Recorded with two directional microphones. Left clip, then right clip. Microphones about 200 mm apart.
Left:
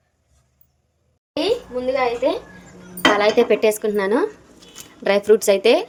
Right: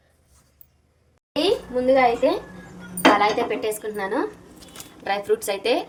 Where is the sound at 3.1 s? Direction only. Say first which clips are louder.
Left 5 dB; 55° left (ahead or behind).